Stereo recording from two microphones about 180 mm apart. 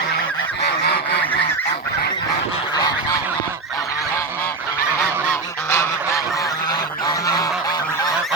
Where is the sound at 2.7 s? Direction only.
20° left (ahead or behind).